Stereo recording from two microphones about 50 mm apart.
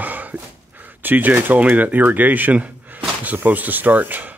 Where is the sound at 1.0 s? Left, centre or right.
Right.